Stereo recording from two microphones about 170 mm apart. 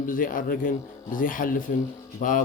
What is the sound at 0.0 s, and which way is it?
Speech, 55° left (ahead or behind).